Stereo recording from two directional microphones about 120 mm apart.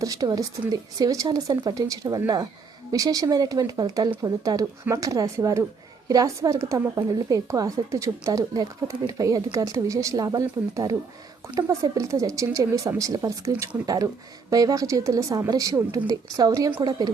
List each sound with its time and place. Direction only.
0.0 s a woman's voice: 30° right (ahead or behind)